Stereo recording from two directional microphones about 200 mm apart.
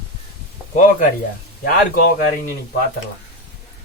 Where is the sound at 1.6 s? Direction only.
50° left (ahead or behind).